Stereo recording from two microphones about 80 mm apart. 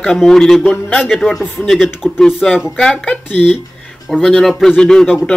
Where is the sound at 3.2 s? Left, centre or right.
Left.